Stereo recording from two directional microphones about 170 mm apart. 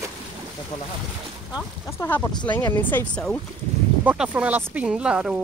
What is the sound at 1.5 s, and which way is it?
Speech, 15° left (ahead or behind).